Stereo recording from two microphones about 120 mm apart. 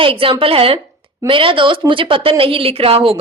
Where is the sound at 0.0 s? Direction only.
50° right (ahead or behind).